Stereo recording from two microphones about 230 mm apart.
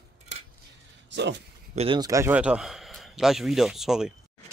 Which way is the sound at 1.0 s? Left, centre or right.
Right.